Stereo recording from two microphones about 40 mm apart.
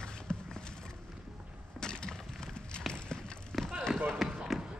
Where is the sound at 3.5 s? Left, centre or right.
Centre.